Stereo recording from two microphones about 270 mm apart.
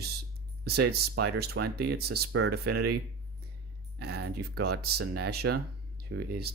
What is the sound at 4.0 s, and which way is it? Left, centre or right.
Speech, right.